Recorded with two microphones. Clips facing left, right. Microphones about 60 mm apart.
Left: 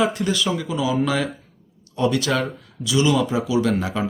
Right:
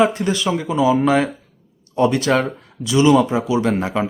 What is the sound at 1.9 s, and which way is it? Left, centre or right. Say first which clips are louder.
Speech: right 4 dB; right.